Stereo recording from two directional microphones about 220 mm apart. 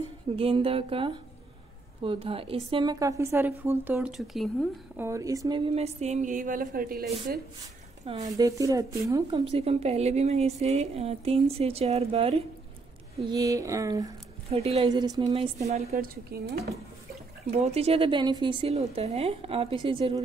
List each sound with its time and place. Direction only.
0.4 s a woman's voice: 25° right (ahead or behind); by 5.0 s centre (ahead or behind)
5.0 s speech: 15° right (ahead or behind); by 7.4 s 45° right (ahead or behind)
8.0 s a woman's voice: 30° right (ahead or behind)
8.3 s a woman's voice: 15° right (ahead or behind)
9.4 s a woman's voice: 25° right (ahead or behind)
13.3 s a woman's voice: 15° right (ahead or behind)
16.3 s speech: 45° right (ahead or behind)
17.5 s a woman's voice: 30° right (ahead or behind)